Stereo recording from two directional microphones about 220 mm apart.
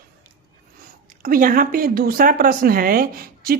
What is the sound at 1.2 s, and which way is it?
Speech, 40° right (ahead or behind).